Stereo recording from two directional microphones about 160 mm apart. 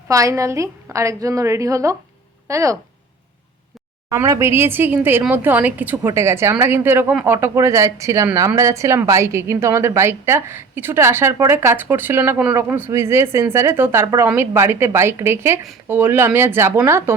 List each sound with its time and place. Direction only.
0.1 s a woman's voice: 20° right (ahead or behind)
4.1 s speech: 20° right (ahead or behind)